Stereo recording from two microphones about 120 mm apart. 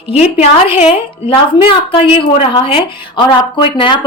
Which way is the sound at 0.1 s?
55° left (ahead or behind).